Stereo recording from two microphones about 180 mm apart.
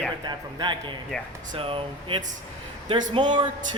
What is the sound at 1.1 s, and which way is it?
Speech, centre (ahead or behind).